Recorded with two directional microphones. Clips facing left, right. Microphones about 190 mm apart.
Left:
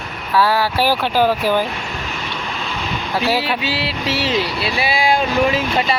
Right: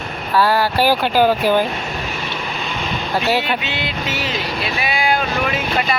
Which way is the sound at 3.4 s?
30° left (ahead or behind).